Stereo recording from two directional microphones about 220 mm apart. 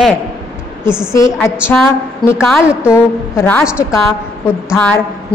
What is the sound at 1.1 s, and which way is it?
Speech, 15° left (ahead or behind).